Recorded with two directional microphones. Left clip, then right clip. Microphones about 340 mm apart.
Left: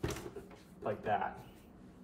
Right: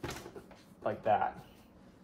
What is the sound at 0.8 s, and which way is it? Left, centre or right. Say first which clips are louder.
Speech: right 5 dB; right.